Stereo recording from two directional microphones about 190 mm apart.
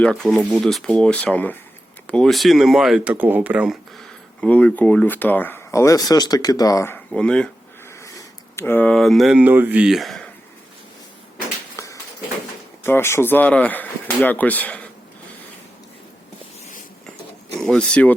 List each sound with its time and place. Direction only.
0.0 s speech: 5° left (ahead or behind)
8.0 s speech: 15° left (ahead or behind)
11.8 s a sound: 15° left (ahead or behind)
12.8 s speech: 10° left (ahead or behind)
17.6 s speech: 5° left (ahead or behind)